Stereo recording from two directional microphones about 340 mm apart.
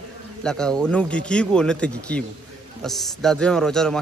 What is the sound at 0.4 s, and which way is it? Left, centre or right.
Speech, centre.